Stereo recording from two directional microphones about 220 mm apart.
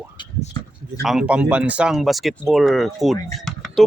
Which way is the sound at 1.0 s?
5° right (ahead or behind).